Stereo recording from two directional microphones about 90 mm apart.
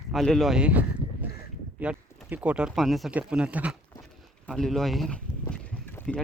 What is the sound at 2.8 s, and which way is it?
Speech, centre (ahead or behind).